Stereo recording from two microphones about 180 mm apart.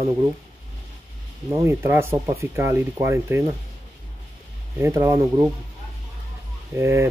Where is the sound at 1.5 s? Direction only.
15° right (ahead or behind).